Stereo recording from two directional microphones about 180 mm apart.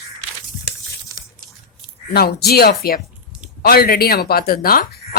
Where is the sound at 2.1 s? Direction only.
60° left (ahead or behind).